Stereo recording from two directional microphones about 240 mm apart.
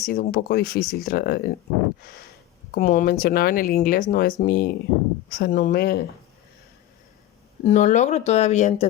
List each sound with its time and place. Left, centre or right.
0.0 s speech: left
2.7 s speech: left
7.6 s speech: left